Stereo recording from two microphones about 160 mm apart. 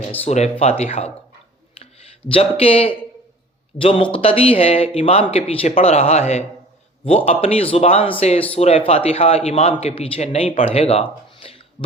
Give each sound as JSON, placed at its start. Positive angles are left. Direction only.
{"t": 0.3, "sound": "speech", "side_deg": 45}
{"t": 2.3, "sound": "speech", "side_deg": 35}